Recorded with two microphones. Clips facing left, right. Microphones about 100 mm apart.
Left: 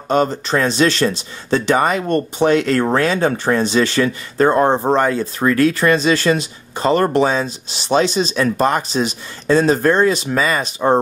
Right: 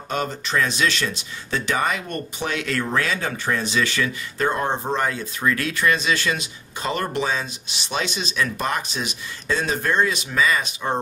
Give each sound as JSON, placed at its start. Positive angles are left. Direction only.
{"t": 0.1, "sound": "speech", "side_deg": 35}